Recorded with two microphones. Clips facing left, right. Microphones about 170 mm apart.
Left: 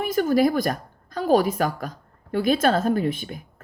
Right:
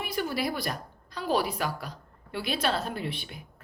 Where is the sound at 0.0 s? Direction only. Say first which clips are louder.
Left 11 dB; 45° left (ahead or behind).